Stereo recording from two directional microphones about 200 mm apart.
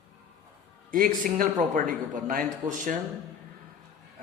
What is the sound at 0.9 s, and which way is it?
A man's voice, 45° right (ahead or behind).